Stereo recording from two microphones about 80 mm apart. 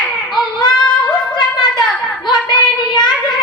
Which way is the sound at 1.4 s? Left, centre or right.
Left.